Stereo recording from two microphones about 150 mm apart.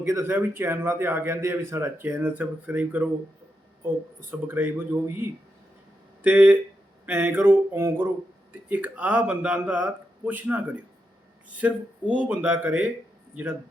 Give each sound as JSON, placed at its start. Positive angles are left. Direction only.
{"t": 0.0, "sound": "a man's voice", "side_deg": -15}
{"t": 6.2, "sound": "a man's voice", "side_deg": -10}